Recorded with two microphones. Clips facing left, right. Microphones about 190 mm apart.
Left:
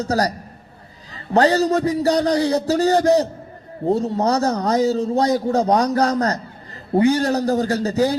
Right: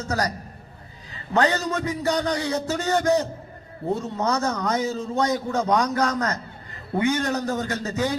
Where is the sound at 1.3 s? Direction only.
35° left (ahead or behind).